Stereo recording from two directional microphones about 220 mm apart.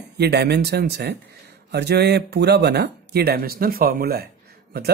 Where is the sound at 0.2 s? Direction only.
50° right (ahead or behind).